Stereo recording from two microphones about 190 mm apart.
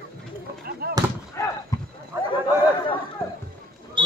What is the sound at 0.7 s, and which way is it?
Fireworks, 55° right (ahead or behind).